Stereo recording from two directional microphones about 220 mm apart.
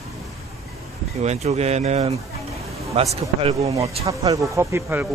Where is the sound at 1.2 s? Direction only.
30° right (ahead or behind).